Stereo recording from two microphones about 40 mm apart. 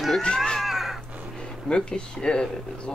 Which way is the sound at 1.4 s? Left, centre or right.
Centre.